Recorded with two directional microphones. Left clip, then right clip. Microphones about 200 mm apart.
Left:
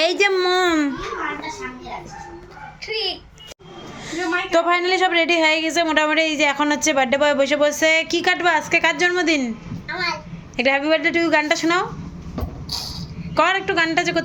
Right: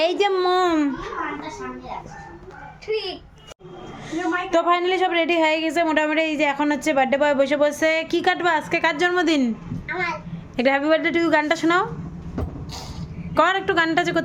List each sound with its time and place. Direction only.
0.0 s a sound: 10° right (ahead or behind)
2.8 s a child's voice: 55° right (ahead or behind)
4.1 s a woman's voice: 10° right (ahead or behind)
9.8 s babbling: centre (ahead or behind)
10.6 s a woman's voice: 20° right (ahead or behind)
13.3 s a woman's voice: 20° right (ahead or behind)